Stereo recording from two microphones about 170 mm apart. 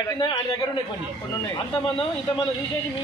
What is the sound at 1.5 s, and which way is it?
Speech, 30° left (ahead or behind).